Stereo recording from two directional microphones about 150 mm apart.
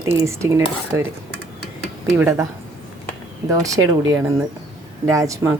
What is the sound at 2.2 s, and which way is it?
Speech, 20° right (ahead or behind).